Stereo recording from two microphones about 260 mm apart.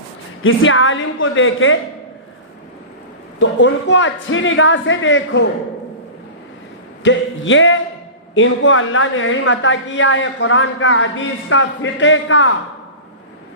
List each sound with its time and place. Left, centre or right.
0.4 s a woman's voice: left
3.4 s a woman's voice: left
7.0 s a woman's voice: left